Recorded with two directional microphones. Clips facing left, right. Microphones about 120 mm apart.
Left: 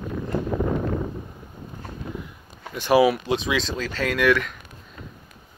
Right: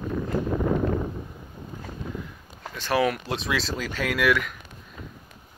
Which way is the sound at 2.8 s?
10° left (ahead or behind).